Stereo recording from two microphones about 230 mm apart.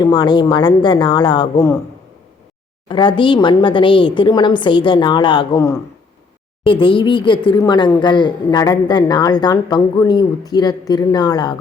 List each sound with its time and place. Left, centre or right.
0.0 s a woman's voice: centre
2.9 s a woman's voice: left